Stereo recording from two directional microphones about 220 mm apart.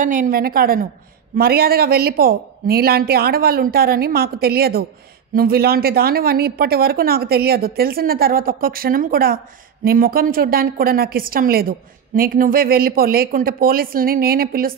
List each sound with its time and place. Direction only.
0.0 s speech: 40° right (ahead or behind)